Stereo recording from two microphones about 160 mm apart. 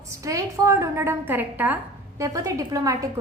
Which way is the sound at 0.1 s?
20° right (ahead or behind).